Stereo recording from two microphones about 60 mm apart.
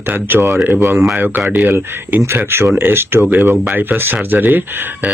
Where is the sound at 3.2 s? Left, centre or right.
Right.